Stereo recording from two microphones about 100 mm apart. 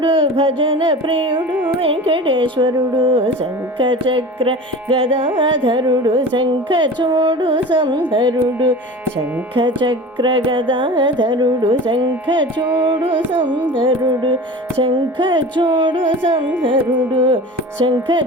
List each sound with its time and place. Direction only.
0.0 s music: 60° right (ahead or behind)
1.4 s carnatic music: 15° right (ahead or behind)
1.8 s music: 65° right (ahead or behind)
13.7 s music: 50° right (ahead or behind)